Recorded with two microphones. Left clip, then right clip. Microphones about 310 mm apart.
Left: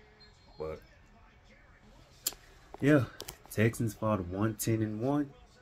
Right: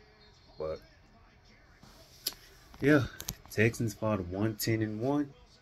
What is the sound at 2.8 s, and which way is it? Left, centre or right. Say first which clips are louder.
Speech: right 1 dB; centre.